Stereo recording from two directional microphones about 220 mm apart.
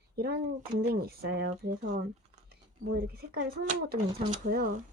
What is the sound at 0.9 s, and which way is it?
Speech, 45° right (ahead or behind).